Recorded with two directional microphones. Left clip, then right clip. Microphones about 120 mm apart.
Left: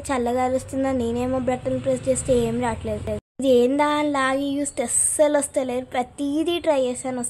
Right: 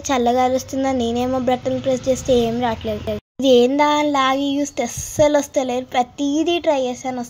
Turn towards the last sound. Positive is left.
turn(degrees=0)  # may be behind; listen again after turning